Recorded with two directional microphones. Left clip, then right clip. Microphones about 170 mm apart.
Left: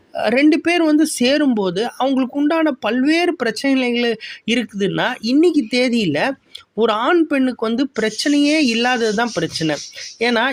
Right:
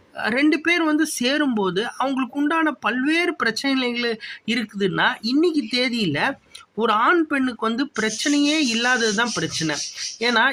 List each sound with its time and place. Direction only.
0.2 s speech: 40° left (ahead or behind)